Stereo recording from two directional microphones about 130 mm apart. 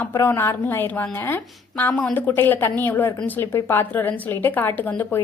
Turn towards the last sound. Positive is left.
turn(degrees=15)  # may be behind; listen again after turning